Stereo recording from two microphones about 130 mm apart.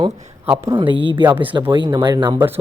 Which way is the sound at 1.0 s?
40° right (ahead or behind).